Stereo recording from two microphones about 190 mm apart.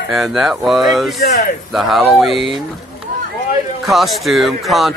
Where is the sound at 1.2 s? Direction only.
55° left (ahead or behind).